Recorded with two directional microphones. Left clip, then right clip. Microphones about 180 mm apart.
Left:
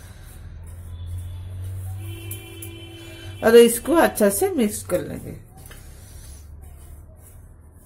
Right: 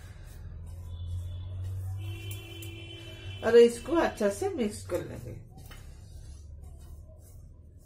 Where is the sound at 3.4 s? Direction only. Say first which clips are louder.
Left 7 dB; 50° left (ahead or behind).